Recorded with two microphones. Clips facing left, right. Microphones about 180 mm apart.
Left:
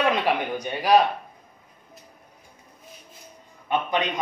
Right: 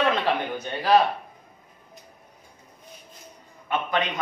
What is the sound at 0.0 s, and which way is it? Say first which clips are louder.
A man's voice: left 1 dB; 15° left (ahead or behind).